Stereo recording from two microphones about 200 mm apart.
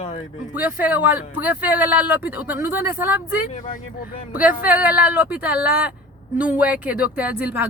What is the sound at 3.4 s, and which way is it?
Speech, 40° left (ahead or behind).